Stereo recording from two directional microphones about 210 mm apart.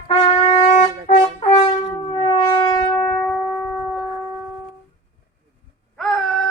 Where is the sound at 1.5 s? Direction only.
25° left (ahead or behind).